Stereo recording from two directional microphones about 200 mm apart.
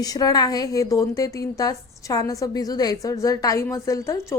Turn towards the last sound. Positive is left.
turn(degrees=15)  # may be behind; listen again after turning